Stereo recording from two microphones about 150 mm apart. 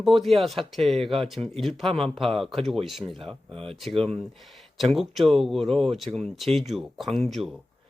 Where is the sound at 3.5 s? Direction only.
35° right (ahead or behind).